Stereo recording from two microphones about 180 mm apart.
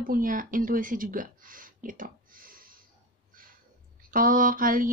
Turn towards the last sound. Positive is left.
turn(degrees=-50)  # may be behind; listen again after turning